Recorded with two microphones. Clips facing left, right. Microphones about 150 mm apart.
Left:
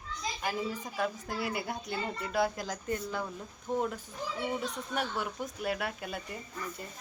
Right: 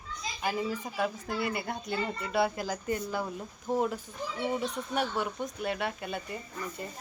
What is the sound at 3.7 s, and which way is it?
Speech, 35° right (ahead or behind).